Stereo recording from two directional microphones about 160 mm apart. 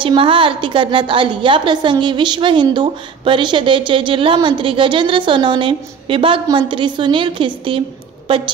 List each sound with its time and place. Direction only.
0.0 s a woman's voice: 35° right (ahead or behind)